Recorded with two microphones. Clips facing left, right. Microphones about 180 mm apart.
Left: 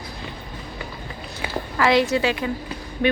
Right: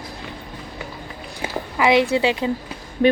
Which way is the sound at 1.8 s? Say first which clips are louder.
Right 2 dB; 20° right (ahead or behind).